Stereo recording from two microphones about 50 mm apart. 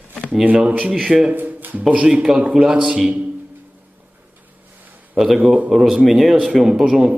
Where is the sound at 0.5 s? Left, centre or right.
Right.